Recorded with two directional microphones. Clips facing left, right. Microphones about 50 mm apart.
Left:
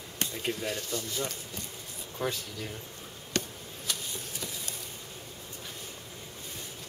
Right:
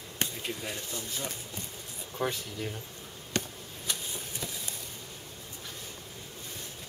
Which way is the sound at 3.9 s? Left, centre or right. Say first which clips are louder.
Even; centre.